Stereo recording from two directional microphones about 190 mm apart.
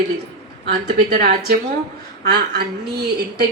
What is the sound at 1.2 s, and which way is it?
A woman's voice, 55° right (ahead or behind).